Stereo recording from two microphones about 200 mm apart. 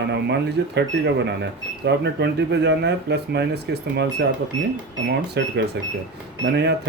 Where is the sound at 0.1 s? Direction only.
60° right (ahead or behind).